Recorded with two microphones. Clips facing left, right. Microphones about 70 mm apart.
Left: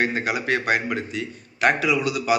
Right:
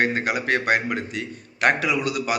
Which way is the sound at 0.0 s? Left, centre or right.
Right.